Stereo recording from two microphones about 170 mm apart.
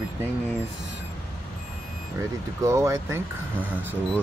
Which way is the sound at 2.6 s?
20° right (ahead or behind).